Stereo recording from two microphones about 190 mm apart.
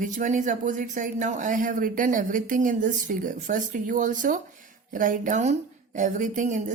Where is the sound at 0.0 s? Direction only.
45° right (ahead or behind).